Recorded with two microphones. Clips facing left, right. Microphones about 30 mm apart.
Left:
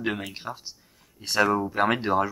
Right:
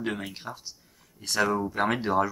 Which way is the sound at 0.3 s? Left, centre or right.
Centre.